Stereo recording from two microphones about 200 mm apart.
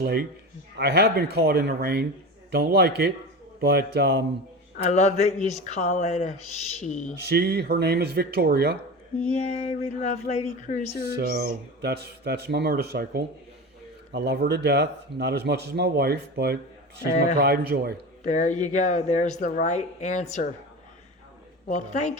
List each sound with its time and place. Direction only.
0.0 s speech: 50° right (ahead or behind)
4.9 s speech: 35° left (ahead or behind)
7.3 s speech: 55° right (ahead or behind)
9.2 s speech: 35° left (ahead or behind)
11.2 s speech: 55° right (ahead or behind)
18.3 s speech: 35° left (ahead or behind)
21.7 s speech: 35° left (ahead or behind)